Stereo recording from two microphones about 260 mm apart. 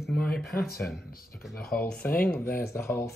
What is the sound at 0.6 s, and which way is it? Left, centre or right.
Speech, left.